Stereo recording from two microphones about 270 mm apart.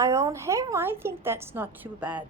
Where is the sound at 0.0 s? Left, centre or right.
Centre.